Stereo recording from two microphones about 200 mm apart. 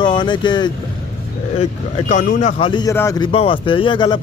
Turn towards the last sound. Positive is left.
turn(degrees=25)  # may be behind; listen again after turning